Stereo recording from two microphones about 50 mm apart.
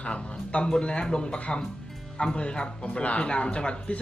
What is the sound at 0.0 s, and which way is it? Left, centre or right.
Speech, left.